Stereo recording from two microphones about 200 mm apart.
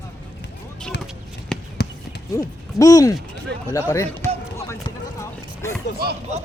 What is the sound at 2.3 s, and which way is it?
Speech, 15° left (ahead or behind).